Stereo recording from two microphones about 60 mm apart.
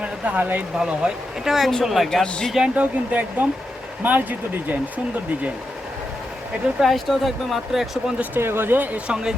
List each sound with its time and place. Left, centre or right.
0.0 s speech: right
0.8 s speech: centre
2.0 s speech: centre
2.7 s speech: right
6.7 s speech: centre
8.4 s speech: right
9.0 s speech: centre